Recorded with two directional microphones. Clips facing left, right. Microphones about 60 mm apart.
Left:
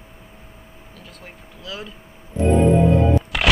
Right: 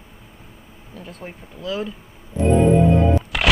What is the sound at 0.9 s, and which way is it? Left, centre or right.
Speech, right.